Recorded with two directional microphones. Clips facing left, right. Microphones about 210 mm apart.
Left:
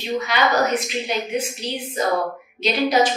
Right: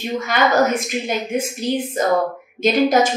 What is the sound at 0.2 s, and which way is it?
A woman's voice, 50° right (ahead or behind).